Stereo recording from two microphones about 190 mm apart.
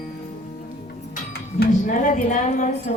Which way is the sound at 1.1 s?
60° left (ahead or behind).